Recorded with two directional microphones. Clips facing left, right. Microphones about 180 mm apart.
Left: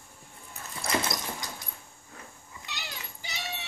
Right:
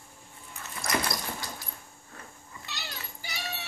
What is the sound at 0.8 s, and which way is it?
Dog, 20° left (ahead or behind).